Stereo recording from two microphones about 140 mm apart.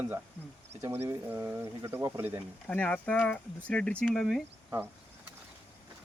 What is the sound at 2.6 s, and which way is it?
Speech, 10° left (ahead or behind).